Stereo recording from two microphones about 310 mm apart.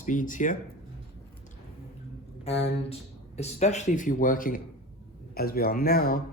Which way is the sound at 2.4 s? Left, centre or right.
Centre.